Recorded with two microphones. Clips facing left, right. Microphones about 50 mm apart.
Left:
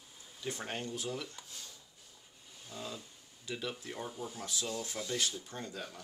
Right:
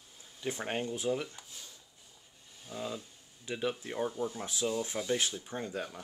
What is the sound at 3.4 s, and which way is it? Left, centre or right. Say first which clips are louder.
Speech: right 5 dB; right.